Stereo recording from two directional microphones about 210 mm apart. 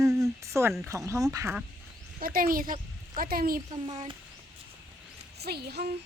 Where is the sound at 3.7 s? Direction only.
25° right (ahead or behind).